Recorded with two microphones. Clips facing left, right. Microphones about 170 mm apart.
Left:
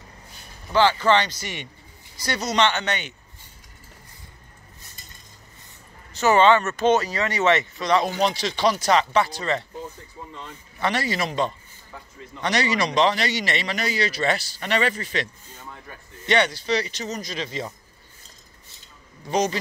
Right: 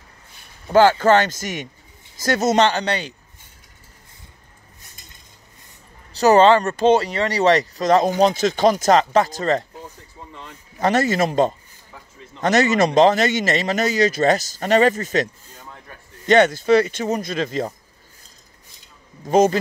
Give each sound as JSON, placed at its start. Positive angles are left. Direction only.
{"t": 0.7, "sound": "a man's voice", "side_deg": -45}
{"t": 6.1, "sound": "speech", "side_deg": -35}
{"t": 10.8, "sound": "a man's voice", "side_deg": -45}
{"t": 16.3, "sound": "a man's voice", "side_deg": -45}
{"t": 19.2, "sound": "a man's voice", "side_deg": -50}